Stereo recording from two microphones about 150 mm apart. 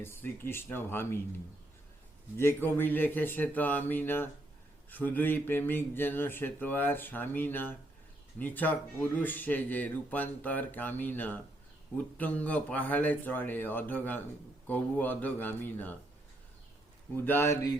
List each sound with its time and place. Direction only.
0.0 s speech: 15° left (ahead or behind)
2.4 s speech: 15° left (ahead or behind)
17.2 s speech: 15° left (ahead or behind)